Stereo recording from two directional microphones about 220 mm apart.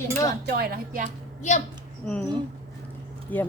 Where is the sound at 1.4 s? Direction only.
35° left (ahead or behind).